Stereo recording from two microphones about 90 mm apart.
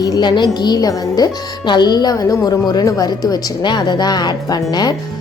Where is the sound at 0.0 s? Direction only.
50° left (ahead or behind).